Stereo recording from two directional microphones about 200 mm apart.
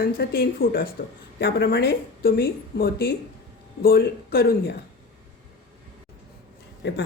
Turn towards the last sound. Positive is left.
turn(degrees=60)  # may be behind; listen again after turning